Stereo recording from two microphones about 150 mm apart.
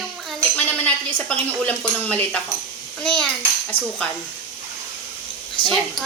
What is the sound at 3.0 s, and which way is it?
Child singing, 5° left (ahead or behind).